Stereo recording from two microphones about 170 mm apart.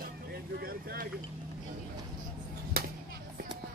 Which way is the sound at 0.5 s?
60° right (ahead or behind).